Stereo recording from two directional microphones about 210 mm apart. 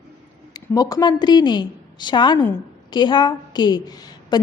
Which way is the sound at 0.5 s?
15° left (ahead or behind).